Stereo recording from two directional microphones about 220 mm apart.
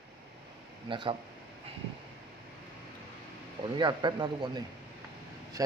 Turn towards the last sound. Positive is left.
turn(degrees=-20)  # may be behind; listen again after turning